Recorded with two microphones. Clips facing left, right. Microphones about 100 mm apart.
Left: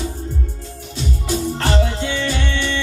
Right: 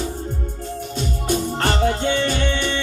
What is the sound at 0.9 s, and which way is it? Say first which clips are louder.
Music: even; 50° right (ahead or behind).